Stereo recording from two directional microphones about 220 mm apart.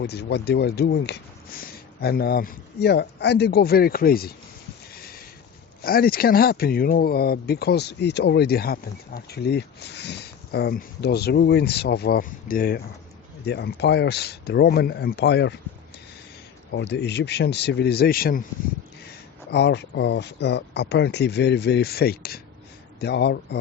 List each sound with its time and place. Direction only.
0.0 s speech: 50° left (ahead or behind)
4.9 s a sound: 45° left (ahead or behind)
5.8 s speech: 40° left (ahead or behind)
16.7 s speech: 50° left (ahead or behind)
19.5 s speech: 50° left (ahead or behind)